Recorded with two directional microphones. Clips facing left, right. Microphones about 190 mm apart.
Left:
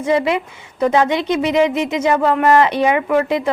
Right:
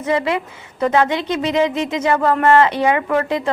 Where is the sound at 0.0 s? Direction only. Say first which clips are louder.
Left 2 dB; 15° left (ahead or behind).